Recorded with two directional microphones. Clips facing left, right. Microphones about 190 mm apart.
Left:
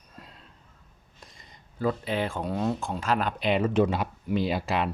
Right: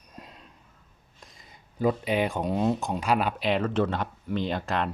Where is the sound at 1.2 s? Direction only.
Centre (ahead or behind).